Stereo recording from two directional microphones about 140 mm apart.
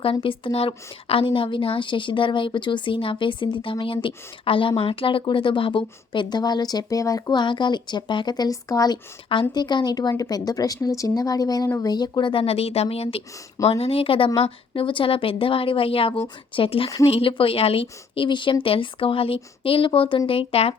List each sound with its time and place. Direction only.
0.0 s a woman's voice: 40° left (ahead or behind)